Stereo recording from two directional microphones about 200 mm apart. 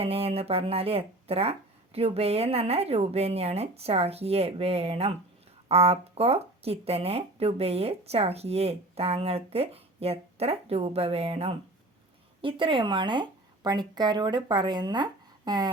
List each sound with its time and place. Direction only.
0.0 s speech: 30° right (ahead or behind)